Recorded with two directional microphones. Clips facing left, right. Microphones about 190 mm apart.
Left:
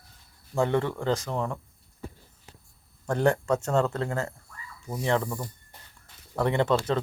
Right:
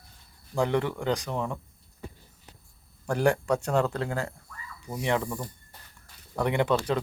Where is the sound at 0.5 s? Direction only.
25° left (ahead or behind).